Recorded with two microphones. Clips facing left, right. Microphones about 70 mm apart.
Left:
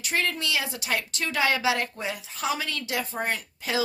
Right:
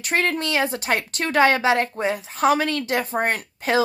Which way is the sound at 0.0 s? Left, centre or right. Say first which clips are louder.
Right 5 dB; right.